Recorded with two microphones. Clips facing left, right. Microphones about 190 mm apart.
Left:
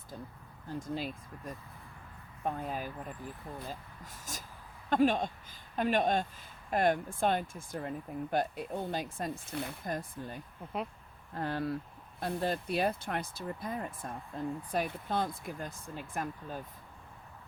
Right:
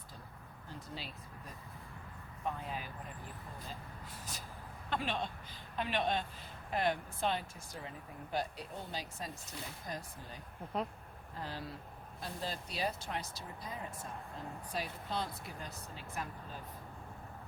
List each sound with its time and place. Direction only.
0.8 s speech: 50° left (ahead or behind)
2.4 s speech: 45° left (ahead or behind)
4.9 s speech: 45° left (ahead or behind)